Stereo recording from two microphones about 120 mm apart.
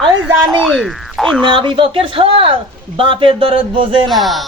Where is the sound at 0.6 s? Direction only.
Centre (ahead or behind).